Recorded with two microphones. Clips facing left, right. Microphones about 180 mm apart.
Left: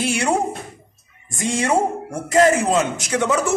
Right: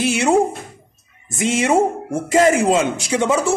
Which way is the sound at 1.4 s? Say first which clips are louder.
Right 3 dB; 25° right (ahead or behind).